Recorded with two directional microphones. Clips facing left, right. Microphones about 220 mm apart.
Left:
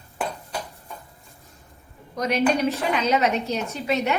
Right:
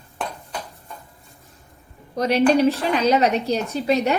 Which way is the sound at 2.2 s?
30° right (ahead or behind).